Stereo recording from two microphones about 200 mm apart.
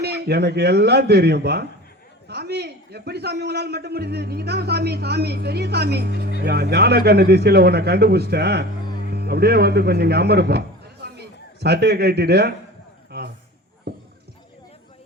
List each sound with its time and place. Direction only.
0.0 s a man's voice: 55° right (ahead or behind)
11.6 s a man's voice: 55° right (ahead or behind)
13.1 s a sound: 55° right (ahead or behind)